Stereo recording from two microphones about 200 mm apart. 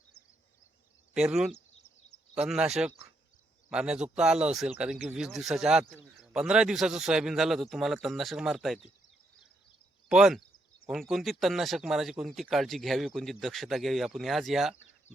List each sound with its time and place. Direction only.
1.1 s speech: 5° right (ahead or behind)
10.1 s speech: 5° right (ahead or behind)